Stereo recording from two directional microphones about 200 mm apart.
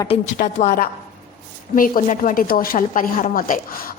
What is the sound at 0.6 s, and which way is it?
A woman's voice, 45° left (ahead or behind).